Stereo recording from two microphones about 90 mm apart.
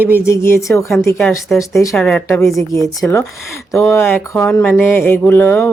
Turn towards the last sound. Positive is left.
turn(degrees=25)  # may be behind; listen again after turning